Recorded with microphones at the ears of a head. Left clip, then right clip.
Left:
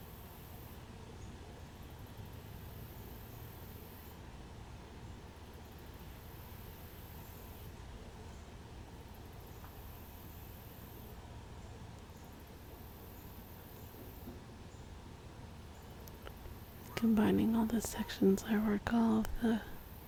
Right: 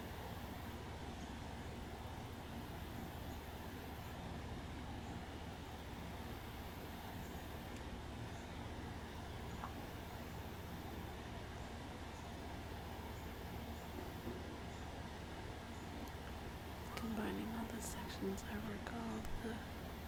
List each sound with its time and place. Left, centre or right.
16.9 s speech: left